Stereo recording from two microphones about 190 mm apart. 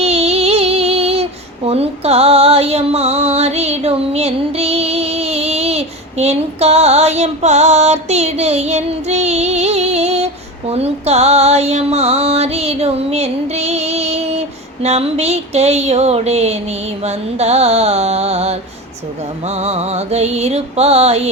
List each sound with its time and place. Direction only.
0.0 s female singing: 35° right (ahead or behind)
10.7 s music: 35° right (ahead or behind)
19.5 s music: 35° right (ahead or behind)